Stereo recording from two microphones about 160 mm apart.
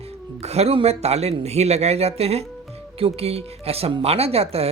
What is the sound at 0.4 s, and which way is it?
Speech, 40° right (ahead or behind).